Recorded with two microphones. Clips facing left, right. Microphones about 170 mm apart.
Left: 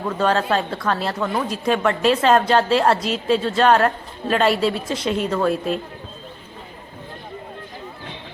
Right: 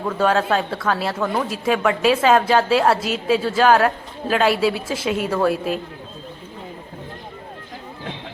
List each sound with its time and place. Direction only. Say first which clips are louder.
0.2 s a woman's voice: right 1 dB; 5° right (ahead or behind)